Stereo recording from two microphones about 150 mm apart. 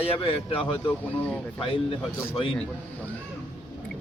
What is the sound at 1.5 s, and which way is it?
Speech, 35° left (ahead or behind).